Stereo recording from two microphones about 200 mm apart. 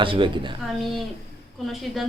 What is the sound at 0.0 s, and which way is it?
Speech, 25° right (ahead or behind).